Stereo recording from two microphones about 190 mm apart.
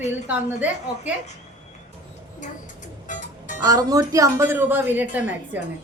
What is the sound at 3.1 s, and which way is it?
Music, 40° left (ahead or behind).